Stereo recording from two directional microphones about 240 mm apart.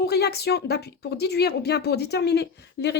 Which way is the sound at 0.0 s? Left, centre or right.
Left.